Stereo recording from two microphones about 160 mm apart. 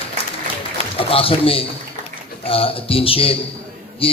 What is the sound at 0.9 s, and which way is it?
A man's voice, 35° left (ahead or behind).